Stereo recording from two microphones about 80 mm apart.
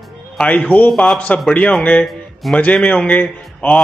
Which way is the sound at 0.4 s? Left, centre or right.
Centre.